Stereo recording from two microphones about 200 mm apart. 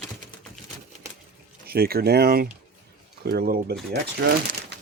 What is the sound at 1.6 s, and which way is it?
Speech, 50° right (ahead or behind).